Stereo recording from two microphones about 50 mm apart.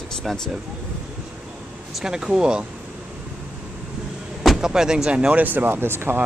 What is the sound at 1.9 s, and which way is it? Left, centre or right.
Speech, centre.